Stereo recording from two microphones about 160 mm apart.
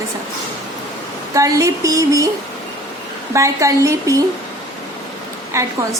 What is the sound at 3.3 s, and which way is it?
Speech, 20° right (ahead or behind).